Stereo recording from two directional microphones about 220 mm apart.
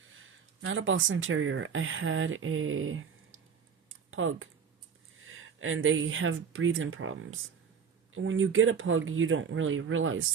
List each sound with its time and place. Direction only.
0.0 s speech: 65° right (ahead or behind)